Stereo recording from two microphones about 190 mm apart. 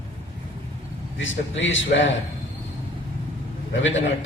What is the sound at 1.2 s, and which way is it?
Speech, 80° left.